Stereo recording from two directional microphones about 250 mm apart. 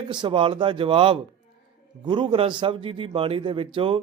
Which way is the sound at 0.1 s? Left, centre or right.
Centre.